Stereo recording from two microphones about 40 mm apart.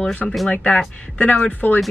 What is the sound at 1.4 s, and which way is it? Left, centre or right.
Speech, left.